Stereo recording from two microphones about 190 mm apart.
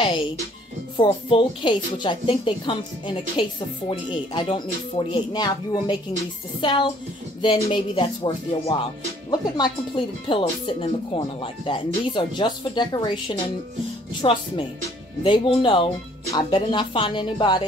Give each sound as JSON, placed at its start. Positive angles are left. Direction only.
{"t": 0.9, "sound": "speech", "side_deg": 25}